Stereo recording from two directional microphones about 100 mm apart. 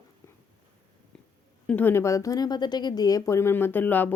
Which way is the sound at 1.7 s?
15° left (ahead or behind).